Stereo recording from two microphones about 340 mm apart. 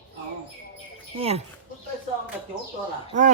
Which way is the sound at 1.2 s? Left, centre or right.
Centre.